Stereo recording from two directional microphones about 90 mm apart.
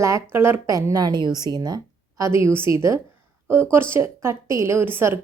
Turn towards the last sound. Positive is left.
turn(degrees=-25)  # may be behind; listen again after turning